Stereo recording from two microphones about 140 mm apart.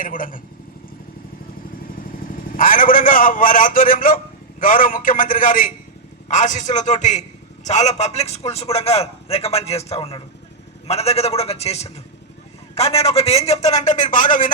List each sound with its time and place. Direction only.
0.0 s a man's voice: 80° left
2.6 s a man's voice: 80° left